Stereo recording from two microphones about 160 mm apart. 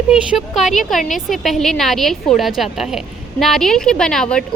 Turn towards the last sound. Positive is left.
turn(degrees=5)  # may be behind; listen again after turning